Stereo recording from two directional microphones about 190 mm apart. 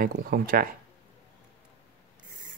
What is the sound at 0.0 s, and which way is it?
Speech, 55° right (ahead or behind).